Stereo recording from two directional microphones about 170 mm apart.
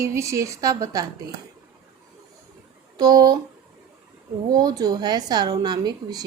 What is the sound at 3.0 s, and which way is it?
Speech, 20° right (ahead or behind).